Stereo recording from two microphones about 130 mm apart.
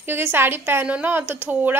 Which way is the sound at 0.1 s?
15° right (ahead or behind).